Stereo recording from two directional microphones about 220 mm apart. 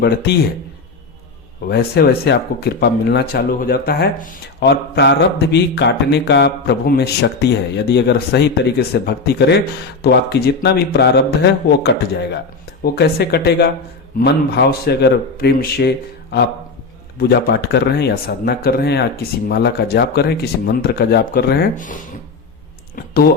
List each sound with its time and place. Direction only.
0.0 s speech: 45° left (ahead or behind)
1.6 s speech: 45° left (ahead or behind)
23.0 s typing: 40° left (ahead or behind)